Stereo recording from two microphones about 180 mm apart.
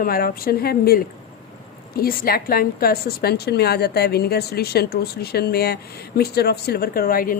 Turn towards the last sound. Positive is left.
turn(degrees=50)  # may be behind; listen again after turning